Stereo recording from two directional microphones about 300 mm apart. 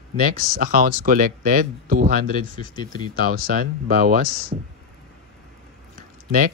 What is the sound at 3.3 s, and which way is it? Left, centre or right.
Speech, right.